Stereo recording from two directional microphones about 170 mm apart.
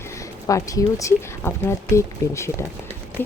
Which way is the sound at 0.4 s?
20° left (ahead or behind).